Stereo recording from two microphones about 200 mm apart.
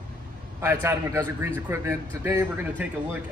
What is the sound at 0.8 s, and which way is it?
A man's voice, 10° right (ahead or behind).